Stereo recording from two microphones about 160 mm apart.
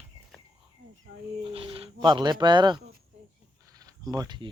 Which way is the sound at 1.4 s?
35° right (ahead or behind).